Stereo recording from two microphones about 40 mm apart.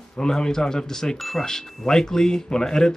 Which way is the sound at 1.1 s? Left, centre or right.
Centre.